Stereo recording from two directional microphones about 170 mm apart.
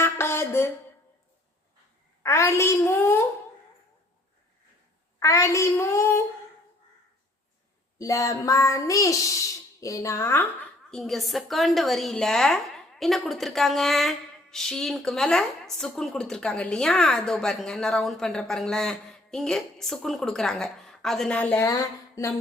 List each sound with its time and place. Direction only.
0.0 s a sound: 15° left (ahead or behind)
2.2 s a woman's voice: 15° left (ahead or behind)
5.2 s child singing: 15° left (ahead or behind)
7.9 s speech: 20° left (ahead or behind)
9.8 s child singing: 20° left (ahead or behind)
10.9 s a woman's voice: centre (ahead or behind)
21.7 s a sound: 20° left (ahead or behind)